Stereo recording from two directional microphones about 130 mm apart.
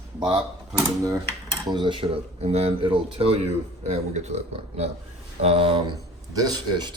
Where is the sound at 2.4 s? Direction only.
50° right (ahead or behind).